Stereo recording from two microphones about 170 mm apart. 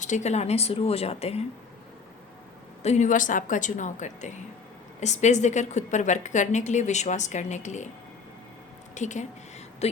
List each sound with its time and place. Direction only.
0.0 s speech: 45° left (ahead or behind)
2.8 s a woman's voice: 45° left (ahead or behind)
9.0 s a woman's voice: 45° left (ahead or behind)